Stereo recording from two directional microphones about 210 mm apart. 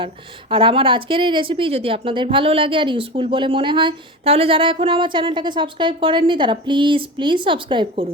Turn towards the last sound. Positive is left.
turn(degrees=-25)  # may be behind; listen again after turning